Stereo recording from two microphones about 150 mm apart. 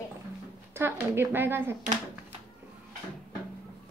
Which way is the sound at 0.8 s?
15° right (ahead or behind).